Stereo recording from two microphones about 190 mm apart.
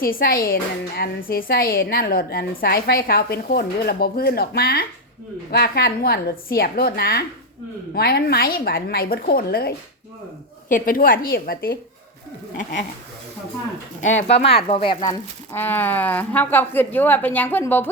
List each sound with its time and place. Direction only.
0.0 s a woman's voice: 50° left (ahead or behind)
14.3 s speech: 30° left (ahead or behind)
15.5 s a woman's voice: 10° left (ahead or behind)